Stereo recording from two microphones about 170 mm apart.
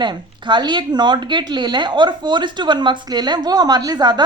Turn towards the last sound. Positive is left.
turn(degrees=-25)  # may be behind; listen again after turning